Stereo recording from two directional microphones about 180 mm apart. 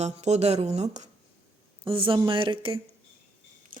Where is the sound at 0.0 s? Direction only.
40° right (ahead or behind).